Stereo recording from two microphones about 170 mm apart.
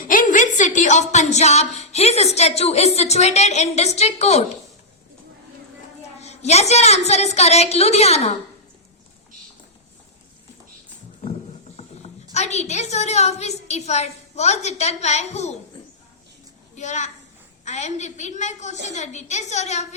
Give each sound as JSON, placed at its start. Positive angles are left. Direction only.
{"t": 0.0, "sound": "a woman's voice", "side_deg": 50}
{"t": 6.1, "sound": "a woman's voice", "side_deg": 40}
{"t": 11.8, "sound": "a woman's voice", "side_deg": 40}
{"t": 16.7, "sound": "a child's voice", "side_deg": 45}